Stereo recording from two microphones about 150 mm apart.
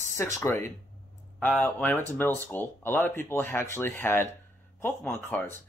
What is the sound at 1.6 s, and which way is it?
Speech, 15° left (ahead or behind).